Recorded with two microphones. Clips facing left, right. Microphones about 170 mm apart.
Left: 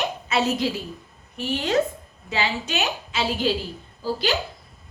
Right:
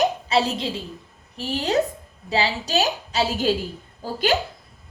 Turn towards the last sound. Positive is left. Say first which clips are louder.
# right 2 dB
turn(degrees=-50)  # may be behind; listen again after turning